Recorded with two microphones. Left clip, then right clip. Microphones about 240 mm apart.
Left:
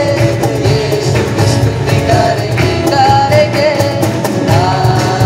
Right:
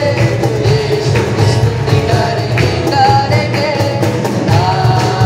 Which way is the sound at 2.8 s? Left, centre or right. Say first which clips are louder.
Left 2 dB; left.